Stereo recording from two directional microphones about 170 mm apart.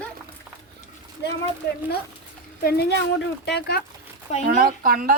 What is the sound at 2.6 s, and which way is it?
A woman's voice, 65° left (ahead or behind).